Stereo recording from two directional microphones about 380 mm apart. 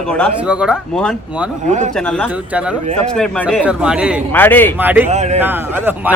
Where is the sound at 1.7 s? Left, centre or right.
Centre.